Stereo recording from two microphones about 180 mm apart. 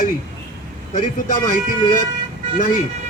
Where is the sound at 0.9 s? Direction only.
45° left (ahead or behind).